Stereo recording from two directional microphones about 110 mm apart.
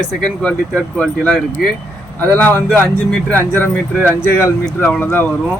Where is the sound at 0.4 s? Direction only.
10° left (ahead or behind).